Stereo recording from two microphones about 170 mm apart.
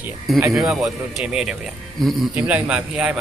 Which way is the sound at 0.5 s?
Centre (ahead or behind).